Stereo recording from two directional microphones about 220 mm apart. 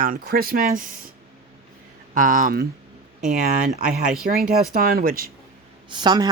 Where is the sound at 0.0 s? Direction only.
40° right (ahead or behind).